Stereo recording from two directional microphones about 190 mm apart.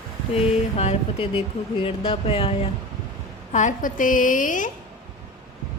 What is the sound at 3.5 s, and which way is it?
A woman's voice, 40° left (ahead or behind).